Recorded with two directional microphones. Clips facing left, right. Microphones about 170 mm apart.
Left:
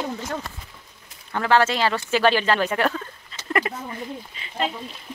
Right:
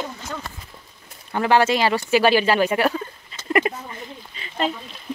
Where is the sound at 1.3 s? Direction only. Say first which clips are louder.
Right 2 dB; 15° right (ahead or behind).